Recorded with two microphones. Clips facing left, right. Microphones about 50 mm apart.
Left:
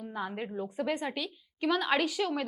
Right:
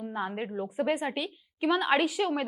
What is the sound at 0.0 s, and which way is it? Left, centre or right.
A woman's voice, centre.